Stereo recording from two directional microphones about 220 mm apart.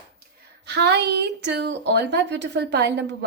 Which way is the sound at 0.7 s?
50° right (ahead or behind).